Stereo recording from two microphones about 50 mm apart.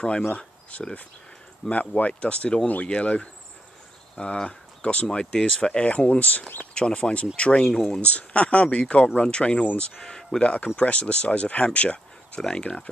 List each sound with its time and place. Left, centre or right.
0.4 s a sound: left
1.7 s speech: left
6.7 s speech: centre
7.6 s speech: centre
7.9 s speech: left